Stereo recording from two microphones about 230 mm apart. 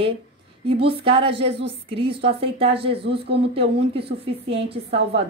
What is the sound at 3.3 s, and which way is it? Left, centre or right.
A woman's voice, right.